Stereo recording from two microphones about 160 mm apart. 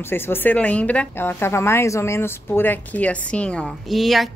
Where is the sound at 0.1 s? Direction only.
15° left (ahead or behind).